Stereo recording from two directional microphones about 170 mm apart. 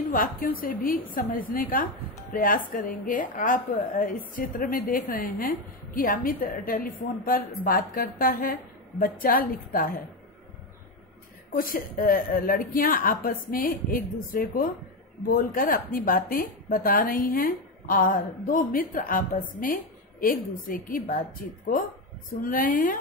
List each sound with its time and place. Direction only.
0.1 s a woman's voice: 55° left (ahead or behind)
11.5 s a woman's voice: 55° left (ahead or behind)
22.3 s a woman's voice: 55° left (ahead or behind)